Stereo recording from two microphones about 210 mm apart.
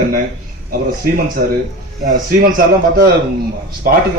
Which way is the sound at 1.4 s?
45° right (ahead or behind).